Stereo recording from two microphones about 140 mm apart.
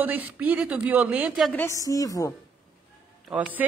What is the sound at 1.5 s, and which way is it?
Speech, 20° left (ahead or behind).